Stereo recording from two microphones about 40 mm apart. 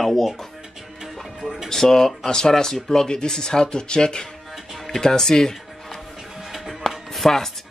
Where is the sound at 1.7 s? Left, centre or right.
Centre.